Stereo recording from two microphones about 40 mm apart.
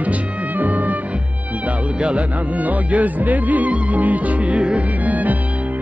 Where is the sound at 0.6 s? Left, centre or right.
Right.